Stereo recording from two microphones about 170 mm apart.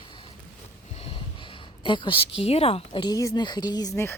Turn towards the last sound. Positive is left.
turn(degrees=25)  # may be behind; listen again after turning